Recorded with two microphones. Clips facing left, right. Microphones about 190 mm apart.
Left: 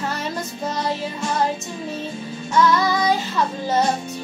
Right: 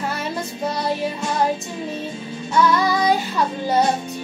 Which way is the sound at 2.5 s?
10° right (ahead or behind).